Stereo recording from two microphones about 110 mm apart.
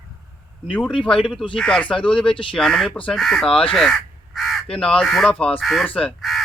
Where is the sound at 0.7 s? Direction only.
10° left (ahead or behind).